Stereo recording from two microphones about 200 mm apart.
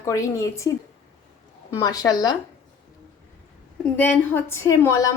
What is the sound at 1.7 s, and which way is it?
Speech, 20° left (ahead or behind).